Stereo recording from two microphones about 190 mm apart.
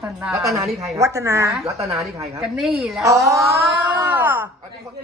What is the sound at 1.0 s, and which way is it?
Speech, 15° right (ahead or behind).